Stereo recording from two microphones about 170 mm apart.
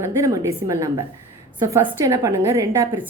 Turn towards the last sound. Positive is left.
turn(degrees=-15)  # may be behind; listen again after turning